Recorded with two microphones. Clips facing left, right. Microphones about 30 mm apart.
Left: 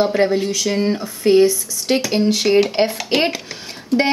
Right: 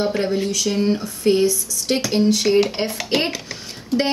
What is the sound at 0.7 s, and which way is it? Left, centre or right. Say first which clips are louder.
A woman's voice: left 1 dB; centre.